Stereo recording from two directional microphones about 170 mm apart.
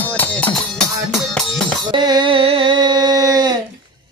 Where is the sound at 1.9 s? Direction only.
25° right (ahead or behind).